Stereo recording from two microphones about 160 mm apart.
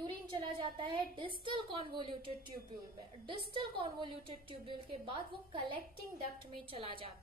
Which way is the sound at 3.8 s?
30° right (ahead or behind).